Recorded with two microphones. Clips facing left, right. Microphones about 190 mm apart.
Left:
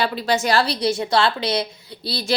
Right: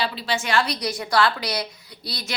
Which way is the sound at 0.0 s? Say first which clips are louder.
Left 5 dB; 50° left (ahead or behind).